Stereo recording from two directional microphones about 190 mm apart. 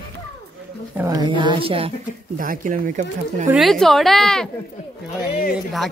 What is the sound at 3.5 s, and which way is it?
Speech, centre (ahead or behind).